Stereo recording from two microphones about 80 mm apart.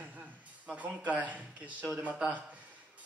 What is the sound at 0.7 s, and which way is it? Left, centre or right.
A man's voice, centre.